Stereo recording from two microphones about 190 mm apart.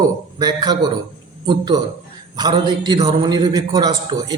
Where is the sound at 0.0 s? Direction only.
20° right (ahead or behind).